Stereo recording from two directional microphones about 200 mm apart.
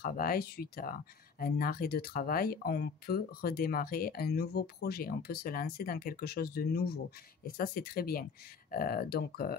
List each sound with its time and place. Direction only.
0.0 s speech: 45° left (ahead or behind)